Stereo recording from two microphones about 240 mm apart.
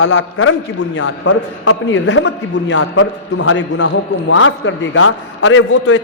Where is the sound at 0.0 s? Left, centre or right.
Left.